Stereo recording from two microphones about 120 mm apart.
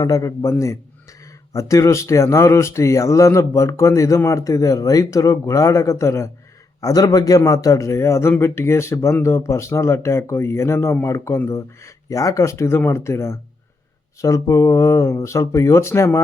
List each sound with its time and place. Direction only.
0.0 s a man's voice: 25° left (ahead or behind)